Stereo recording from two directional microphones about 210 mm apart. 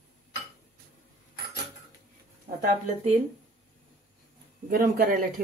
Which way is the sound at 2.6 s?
30° right (ahead or behind).